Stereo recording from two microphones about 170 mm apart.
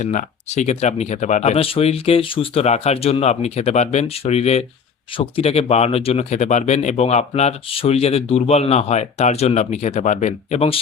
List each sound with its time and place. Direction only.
0.0 s speech: 45° left (ahead or behind)